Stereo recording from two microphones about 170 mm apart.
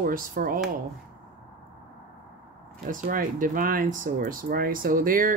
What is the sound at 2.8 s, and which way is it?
Speech, 55° right (ahead or behind).